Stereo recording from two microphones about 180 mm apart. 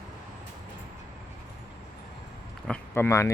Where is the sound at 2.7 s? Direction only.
15° left (ahead or behind).